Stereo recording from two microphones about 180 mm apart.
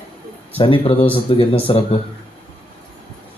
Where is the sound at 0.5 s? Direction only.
30° left (ahead or behind).